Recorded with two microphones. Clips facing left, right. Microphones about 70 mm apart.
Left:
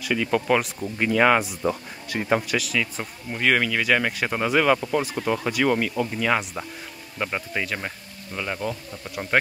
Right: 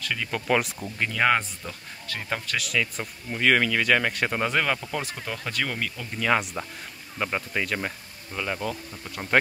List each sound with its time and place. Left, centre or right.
0.0 s speech: centre
1.7 s speech: centre
2.5 s speech: centre